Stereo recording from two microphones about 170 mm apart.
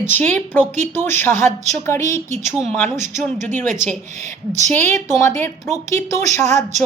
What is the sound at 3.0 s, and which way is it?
Speech, 45° right (ahead or behind).